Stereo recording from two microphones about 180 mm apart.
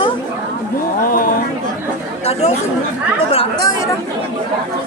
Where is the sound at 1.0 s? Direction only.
50° left (ahead or behind).